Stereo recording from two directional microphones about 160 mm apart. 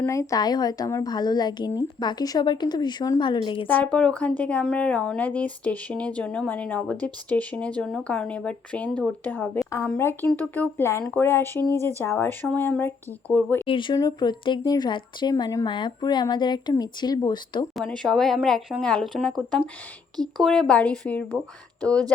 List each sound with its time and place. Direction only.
0.0 s speech: 20° left (ahead or behind)
3.9 s speech: 10° left (ahead or behind)
13.7 s speech: 30° left (ahead or behind)
17.7 s speech: 5° left (ahead or behind)
20.1 s speech: 25° right (ahead or behind)
20.4 s speech: 5° left (ahead or behind)